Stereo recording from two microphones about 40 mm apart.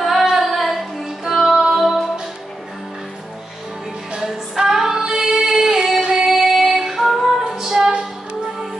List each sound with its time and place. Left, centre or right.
0.2 s a sound: centre
1.3 s music: centre
4.6 s female singing: centre
6.2 s female singing: centre